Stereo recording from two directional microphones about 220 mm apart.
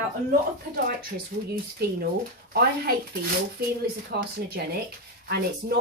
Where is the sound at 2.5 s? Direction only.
45° right (ahead or behind).